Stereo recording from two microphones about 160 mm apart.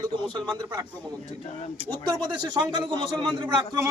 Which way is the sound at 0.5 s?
25° right (ahead or behind).